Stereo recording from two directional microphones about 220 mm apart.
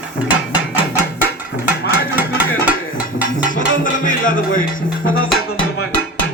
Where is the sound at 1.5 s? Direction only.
55° left (ahead or behind).